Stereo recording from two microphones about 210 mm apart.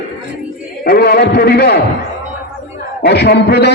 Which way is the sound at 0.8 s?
45° left (ahead or behind).